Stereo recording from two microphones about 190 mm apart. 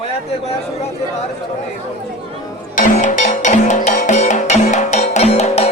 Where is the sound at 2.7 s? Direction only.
40° left (ahead or behind).